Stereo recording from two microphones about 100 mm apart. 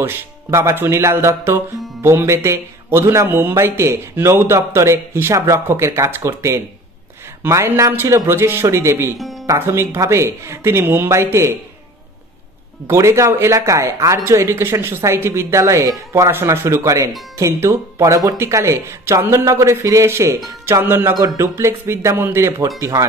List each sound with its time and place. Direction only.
0.0 s speech: 25° right (ahead or behind)
12.8 s speech: 30° right (ahead or behind)
22.8 s speech: 35° right (ahead or behind)